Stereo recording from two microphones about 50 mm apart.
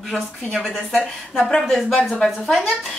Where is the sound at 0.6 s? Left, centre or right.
Centre.